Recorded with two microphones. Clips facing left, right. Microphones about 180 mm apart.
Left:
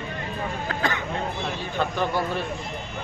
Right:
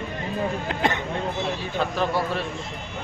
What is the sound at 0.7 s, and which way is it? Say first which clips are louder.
Speech: right 1 dB; 25° right (ahead or behind).